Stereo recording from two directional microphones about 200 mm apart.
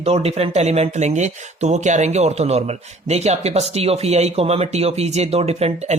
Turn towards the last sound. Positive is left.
turn(degrees=-30)  # may be behind; listen again after turning